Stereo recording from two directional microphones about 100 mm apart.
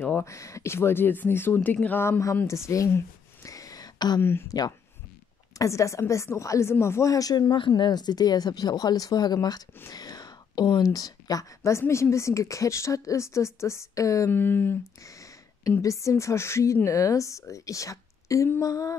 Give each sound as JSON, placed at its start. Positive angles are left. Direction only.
{"t": 0.2, "sound": "speech", "side_deg": 30}
{"t": 3.4, "sound": "a sound", "side_deg": 35}
{"t": 4.2, "sound": "speech", "side_deg": 25}
{"t": 4.5, "sound": "a woman's voice", "side_deg": 40}
{"t": 5.6, "sound": "a woman's voice", "side_deg": 30}
{"t": 7.5, "sound": "speech", "side_deg": 55}
{"t": 15.0, "sound": "a sound", "side_deg": 35}
{"t": 15.8, "sound": "a woman's voice", "side_deg": 30}